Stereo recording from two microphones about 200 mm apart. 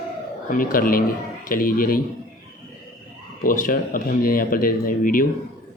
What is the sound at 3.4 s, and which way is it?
Speech, 45° left (ahead or behind).